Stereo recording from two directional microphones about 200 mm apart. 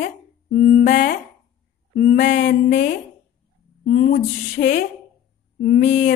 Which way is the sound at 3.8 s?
50° left (ahead or behind).